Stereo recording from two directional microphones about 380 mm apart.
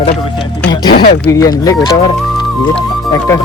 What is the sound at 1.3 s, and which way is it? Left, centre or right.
Speech, centre.